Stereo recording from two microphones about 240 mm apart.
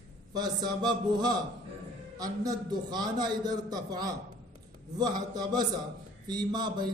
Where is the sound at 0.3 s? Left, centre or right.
Centre.